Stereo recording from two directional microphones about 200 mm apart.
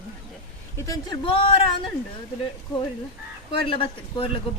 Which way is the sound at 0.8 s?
15° left (ahead or behind).